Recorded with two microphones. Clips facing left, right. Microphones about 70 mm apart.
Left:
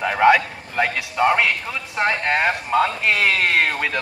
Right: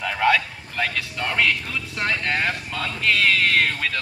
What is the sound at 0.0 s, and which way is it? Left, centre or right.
A man's voice, left.